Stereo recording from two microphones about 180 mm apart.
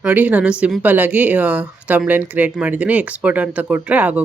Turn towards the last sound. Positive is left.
turn(degrees=-10)  # may be behind; listen again after turning